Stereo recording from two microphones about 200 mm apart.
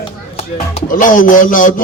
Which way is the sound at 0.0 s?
30° left (ahead or behind).